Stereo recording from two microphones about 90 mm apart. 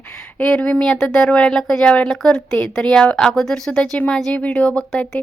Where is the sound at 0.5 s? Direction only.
10° left (ahead or behind).